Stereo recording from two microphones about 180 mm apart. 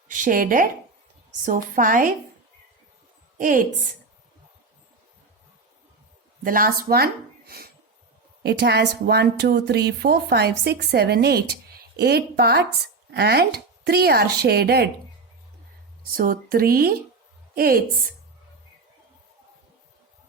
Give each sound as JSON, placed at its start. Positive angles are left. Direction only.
{"t": 0.1, "sound": "a woman's voice", "side_deg": -50}
{"t": 3.3, "sound": "a woman's voice", "side_deg": -50}
{"t": 6.4, "sound": "a woman's voice", "side_deg": -50}
{"t": 16.1, "sound": "a woman's voice", "side_deg": -55}